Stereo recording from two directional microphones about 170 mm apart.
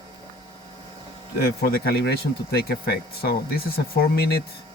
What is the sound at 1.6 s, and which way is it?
Speech, 70° left (ahead or behind).